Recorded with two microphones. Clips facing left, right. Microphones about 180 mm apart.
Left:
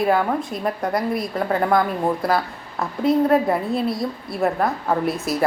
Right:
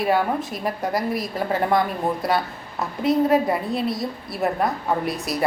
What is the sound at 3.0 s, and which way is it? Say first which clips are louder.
A woman's voice: left 1 dB; centre (ahead or behind).